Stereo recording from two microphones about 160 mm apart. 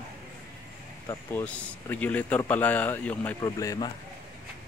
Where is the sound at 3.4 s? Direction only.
20° left (ahead or behind).